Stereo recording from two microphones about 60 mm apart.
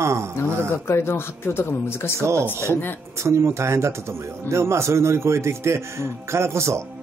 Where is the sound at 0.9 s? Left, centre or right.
Left.